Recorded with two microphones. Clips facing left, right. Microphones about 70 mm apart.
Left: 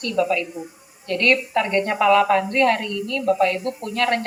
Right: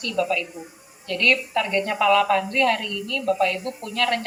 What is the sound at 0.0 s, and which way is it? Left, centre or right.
A woman's voice, left.